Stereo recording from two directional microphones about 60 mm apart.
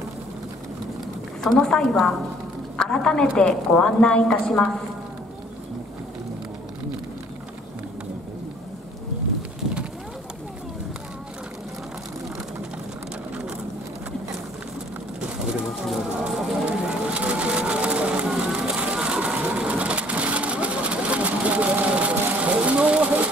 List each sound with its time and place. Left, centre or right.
1.4 s a woman's voice: centre
15.1 s pigeon: centre
16.6 s a sound: centre